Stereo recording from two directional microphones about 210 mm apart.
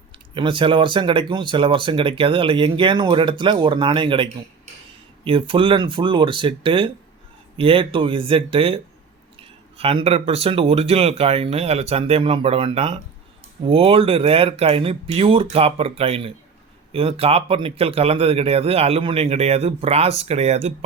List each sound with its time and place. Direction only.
0.3 s speech: 25° right (ahead or behind)